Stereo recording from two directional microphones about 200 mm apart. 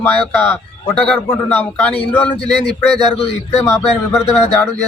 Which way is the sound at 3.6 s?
15° left (ahead or behind).